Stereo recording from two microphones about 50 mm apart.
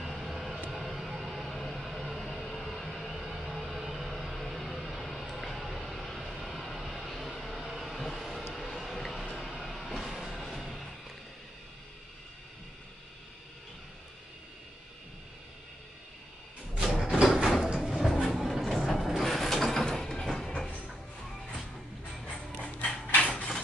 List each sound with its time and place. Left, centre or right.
0.0 s vehicle: centre
8.5 s a sound: centre
9.3 s vehicle: centre
16.8 s a sound: centre
17.4 s sliding door: centre
17.8 s train: centre
18.3 s vehicle: centre
19.0 s music: centre
20.5 s a sound: centre
22.1 s mechanisms: centre
22.6 s mechanisms: left